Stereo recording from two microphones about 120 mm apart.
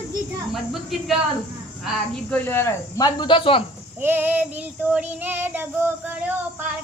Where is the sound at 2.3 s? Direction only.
15° left (ahead or behind).